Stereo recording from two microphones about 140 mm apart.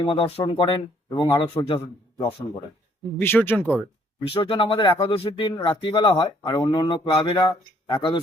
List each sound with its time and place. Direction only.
0.0 s speech: 40° left (ahead or behind)
3.2 s speech: 15° left (ahead or behind)
4.4 s speech: 40° left (ahead or behind)